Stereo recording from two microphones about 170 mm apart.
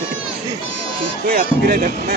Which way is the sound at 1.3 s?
60° right (ahead or behind).